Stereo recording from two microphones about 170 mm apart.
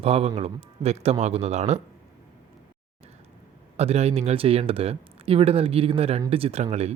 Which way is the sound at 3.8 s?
40° right (ahead or behind).